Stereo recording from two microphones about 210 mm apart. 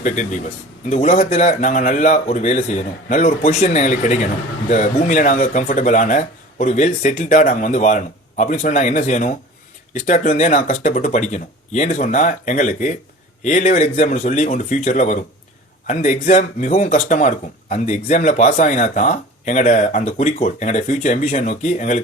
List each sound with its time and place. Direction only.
0.0 s speech: 35° left (ahead or behind)